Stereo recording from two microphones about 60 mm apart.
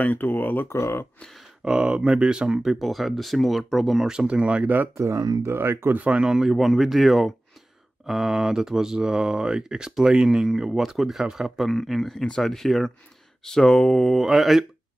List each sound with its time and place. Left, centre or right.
0.0 s speech: left
0.7 s speech: left
1.6 s speech: centre
4.1 s speech: centre
4.9 s speech: right
5.9 s speech: centre
11.7 s speech: centre